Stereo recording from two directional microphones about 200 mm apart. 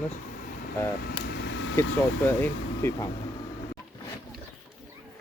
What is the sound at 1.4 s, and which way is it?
Air conditioning, 65° left (ahead or behind).